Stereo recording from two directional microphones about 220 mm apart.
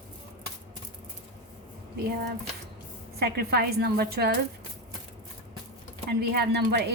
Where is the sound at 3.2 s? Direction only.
45° right (ahead or behind).